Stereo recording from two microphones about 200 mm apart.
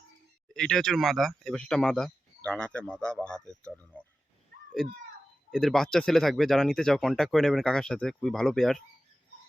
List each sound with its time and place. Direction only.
0.5 s speech: 5° left (ahead or behind)
4.5 s a sound: 45° right (ahead or behind)
5.5 s speech: centre (ahead or behind)